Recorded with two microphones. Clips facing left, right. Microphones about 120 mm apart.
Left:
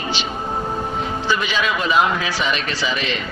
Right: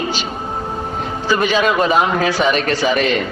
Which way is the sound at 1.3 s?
45° right (ahead or behind).